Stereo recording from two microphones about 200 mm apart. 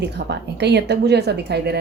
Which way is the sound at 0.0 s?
55° right (ahead or behind).